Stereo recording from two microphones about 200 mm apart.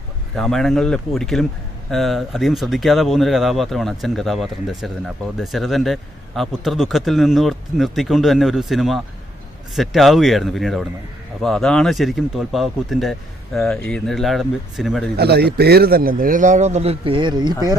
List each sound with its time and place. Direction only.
0.3 s speech: centre (ahead or behind)
15.1 s speech: 55° right (ahead or behind); by 17.5 s 20° right (ahead or behind)